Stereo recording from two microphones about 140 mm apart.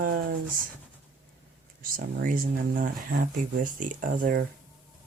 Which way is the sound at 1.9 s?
85° right.